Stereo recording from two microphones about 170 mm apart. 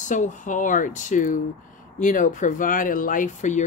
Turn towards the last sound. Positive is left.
turn(degrees=45)  # may be behind; listen again after turning